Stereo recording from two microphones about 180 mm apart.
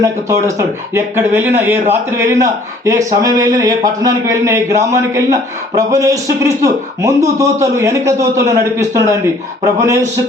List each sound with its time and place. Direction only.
0.0 s speech: 15° right (ahead or behind)